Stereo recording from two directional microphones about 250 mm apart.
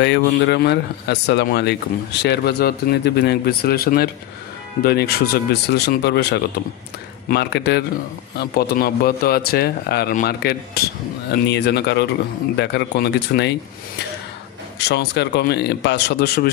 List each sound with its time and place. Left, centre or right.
0.0 s speech: left
14.9 s speech: left